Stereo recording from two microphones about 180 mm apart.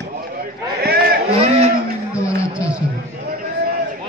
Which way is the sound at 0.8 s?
60° right (ahead or behind).